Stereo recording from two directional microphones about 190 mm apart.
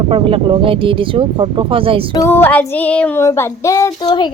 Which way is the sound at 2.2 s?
10° left (ahead or behind).